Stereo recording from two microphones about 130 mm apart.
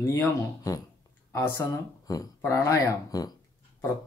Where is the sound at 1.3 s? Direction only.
20° left (ahead or behind).